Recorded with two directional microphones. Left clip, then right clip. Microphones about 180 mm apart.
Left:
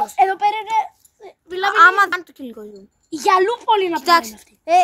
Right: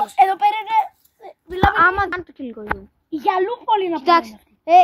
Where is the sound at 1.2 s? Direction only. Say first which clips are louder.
Right 3 dB; 50° right (ahead or behind).